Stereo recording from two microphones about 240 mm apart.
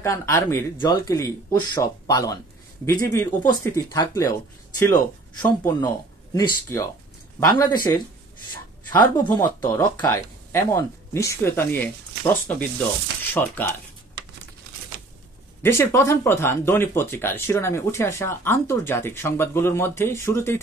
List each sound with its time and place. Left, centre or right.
0.0 s speech: centre
9.2 s speech: centre
15.6 s speech: centre